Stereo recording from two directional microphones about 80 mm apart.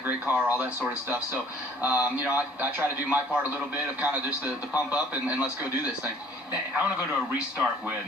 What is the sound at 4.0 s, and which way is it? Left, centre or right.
A man's voice, centre.